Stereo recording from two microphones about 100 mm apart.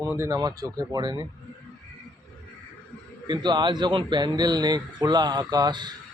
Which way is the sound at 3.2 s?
50° right (ahead or behind).